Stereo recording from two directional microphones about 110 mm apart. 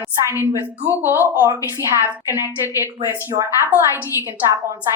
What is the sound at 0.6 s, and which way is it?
A woman's voice, 20° right (ahead or behind).